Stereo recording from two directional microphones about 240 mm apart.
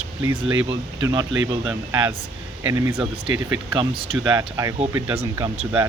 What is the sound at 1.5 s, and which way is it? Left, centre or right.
Speech, centre.